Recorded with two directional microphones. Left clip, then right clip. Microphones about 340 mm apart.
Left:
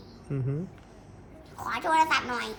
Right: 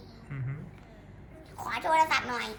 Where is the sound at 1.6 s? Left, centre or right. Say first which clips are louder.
Left 1 dB; centre.